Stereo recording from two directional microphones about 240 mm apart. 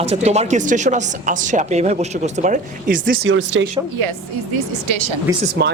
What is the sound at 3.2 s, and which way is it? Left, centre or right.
Speech, right.